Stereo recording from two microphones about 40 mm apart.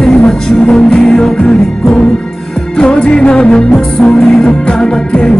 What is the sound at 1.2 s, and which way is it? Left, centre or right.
Music, left.